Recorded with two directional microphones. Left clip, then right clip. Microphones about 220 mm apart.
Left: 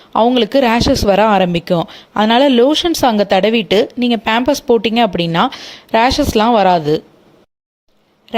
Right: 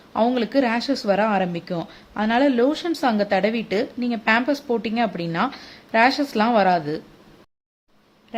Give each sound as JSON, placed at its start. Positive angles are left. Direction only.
{"t": 0.1, "sound": "speech", "side_deg": 35}
{"t": 8.3, "sound": "speech", "side_deg": 40}